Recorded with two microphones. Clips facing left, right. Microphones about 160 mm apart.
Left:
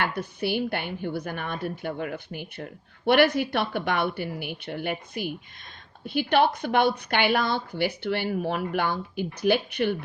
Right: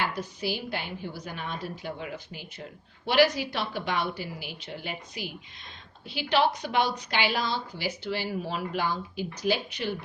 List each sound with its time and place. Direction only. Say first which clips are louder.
0.0 s a woman's voice: left 3 dB; 60° left (ahead or behind)